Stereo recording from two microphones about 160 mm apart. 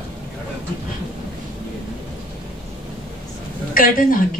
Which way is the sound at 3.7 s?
60° left (ahead or behind).